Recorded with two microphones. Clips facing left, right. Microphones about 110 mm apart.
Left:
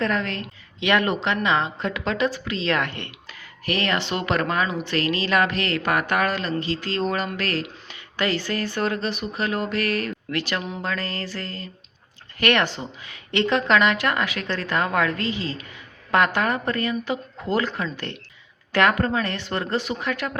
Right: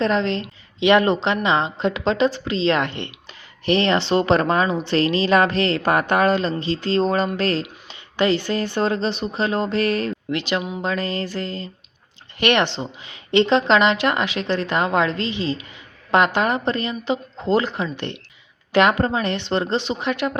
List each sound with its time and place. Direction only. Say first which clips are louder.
0.0 s a woman's voice: right 5 dB; 25° right (ahead or behind)